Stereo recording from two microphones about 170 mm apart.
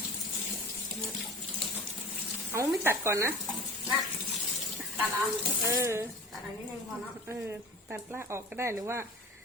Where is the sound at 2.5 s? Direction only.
15° right (ahead or behind).